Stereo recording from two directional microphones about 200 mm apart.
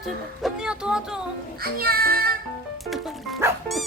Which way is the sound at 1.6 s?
50° right (ahead or behind).